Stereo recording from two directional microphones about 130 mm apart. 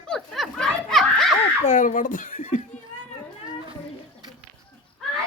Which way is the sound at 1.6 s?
70° left (ahead or behind).